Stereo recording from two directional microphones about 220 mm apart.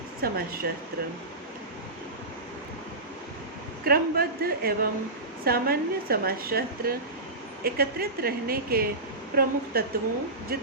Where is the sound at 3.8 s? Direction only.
45° right (ahead or behind).